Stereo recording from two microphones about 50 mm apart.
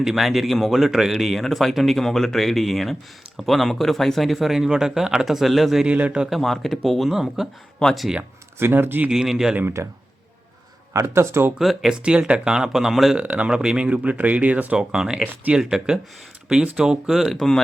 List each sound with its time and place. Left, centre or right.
0.0 s speech: centre
5.8 s speech: right
6.3 s speech: centre
7.4 s speech: centre
7.8 s speech: centre
8.5 s speech: right
9.0 s speech: centre
9.6 s speech: right
10.9 s speech: right
11.6 s speech: centre
11.9 s speech: right; by 13.1 s centre
13.1 s speech: right
13.5 s speech: centre
14.8 s speech: centre